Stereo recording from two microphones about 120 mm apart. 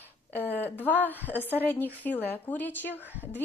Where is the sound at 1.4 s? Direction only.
15° left (ahead or behind).